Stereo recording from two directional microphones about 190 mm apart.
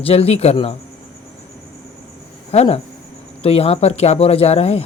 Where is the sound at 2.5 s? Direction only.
30° left (ahead or behind).